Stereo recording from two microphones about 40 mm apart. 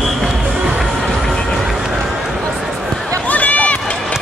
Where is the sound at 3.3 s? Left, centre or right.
Left.